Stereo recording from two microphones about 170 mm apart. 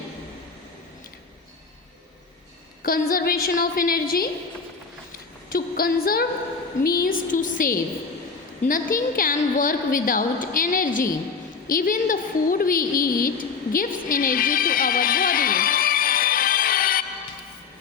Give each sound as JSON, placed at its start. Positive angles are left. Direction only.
{"t": 2.8, "sound": "a woman's voice", "side_deg": 60}
{"t": 5.5, "sound": "female singing", "side_deg": 60}
{"t": 6.8, "sound": "a woman's voice", "side_deg": 60}